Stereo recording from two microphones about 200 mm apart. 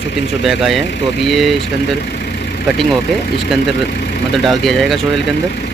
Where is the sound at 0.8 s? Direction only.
55° left (ahead or behind).